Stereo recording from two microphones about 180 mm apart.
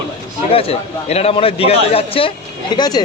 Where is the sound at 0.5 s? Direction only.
30° left (ahead or behind).